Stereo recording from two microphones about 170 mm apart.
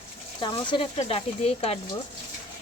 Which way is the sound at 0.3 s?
25° left (ahead or behind).